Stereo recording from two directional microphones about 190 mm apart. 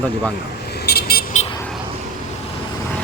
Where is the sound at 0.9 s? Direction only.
55° left (ahead or behind).